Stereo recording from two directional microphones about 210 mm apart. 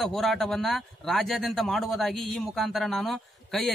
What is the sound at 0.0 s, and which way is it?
Speech, centre (ahead or behind).